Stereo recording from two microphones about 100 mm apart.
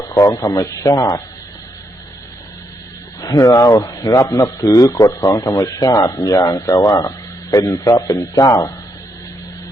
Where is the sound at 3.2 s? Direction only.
35° left (ahead or behind).